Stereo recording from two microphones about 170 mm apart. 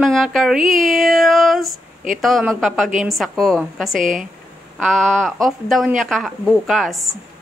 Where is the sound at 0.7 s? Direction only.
Centre (ahead or behind).